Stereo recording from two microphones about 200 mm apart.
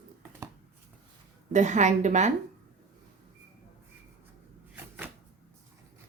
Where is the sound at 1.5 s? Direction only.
35° right (ahead or behind).